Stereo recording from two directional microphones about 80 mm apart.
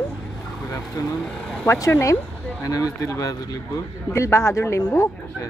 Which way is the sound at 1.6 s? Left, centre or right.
Left.